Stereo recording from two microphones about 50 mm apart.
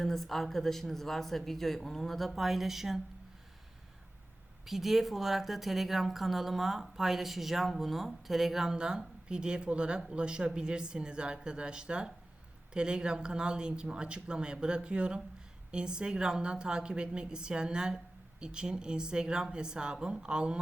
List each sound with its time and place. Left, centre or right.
0.0 s a woman's voice: centre
4.6 s a woman's voice: centre